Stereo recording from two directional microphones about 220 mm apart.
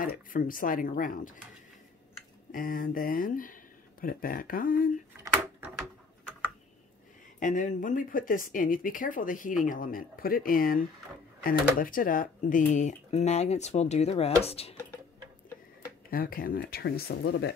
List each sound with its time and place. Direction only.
0.0 s speech: 40° left (ahead or behind)
2.5 s speech: 40° left (ahead or behind)
7.3 s speech: 35° left (ahead or behind)
16.1 s speech: 40° left (ahead or behind)